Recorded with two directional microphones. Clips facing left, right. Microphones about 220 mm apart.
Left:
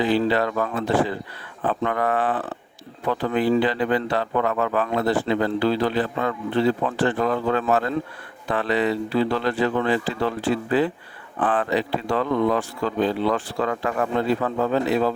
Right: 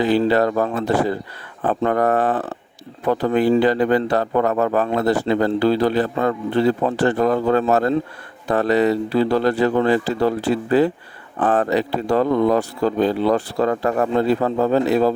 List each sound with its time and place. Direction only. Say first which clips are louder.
0.0 s a man's voice: right 4 dB; 45° right (ahead or behind)